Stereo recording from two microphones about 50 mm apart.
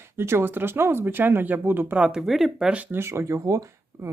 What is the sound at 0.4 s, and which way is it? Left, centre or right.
Speech, right.